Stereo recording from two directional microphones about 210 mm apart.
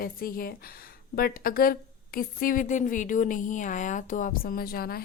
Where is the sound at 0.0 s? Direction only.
45° left (ahead or behind).